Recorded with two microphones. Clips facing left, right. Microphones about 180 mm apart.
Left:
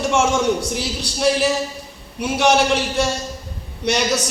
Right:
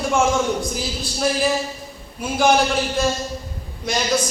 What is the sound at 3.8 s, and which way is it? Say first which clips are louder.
Speech: left 2 dB; 75° left (ahead or behind).